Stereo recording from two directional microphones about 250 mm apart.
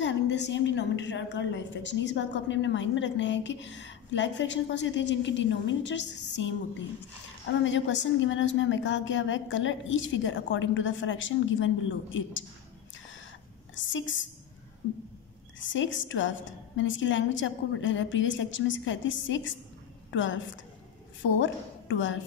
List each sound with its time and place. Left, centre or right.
0.0 s a woman's voice: left
7.6 s a woman's voice: left
13.7 s a woman's voice: left
15.6 s a woman's voice: left